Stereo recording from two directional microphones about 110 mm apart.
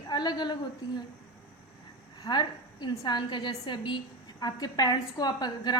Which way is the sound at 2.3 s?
40° left (ahead or behind).